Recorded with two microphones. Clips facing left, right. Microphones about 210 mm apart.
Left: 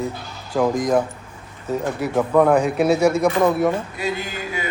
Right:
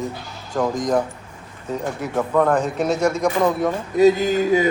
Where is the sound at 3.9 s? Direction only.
40° right (ahead or behind).